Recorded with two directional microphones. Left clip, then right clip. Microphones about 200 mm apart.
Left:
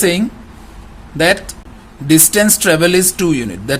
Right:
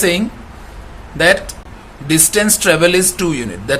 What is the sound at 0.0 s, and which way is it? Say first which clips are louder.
Speech: even; 35° left (ahead or behind).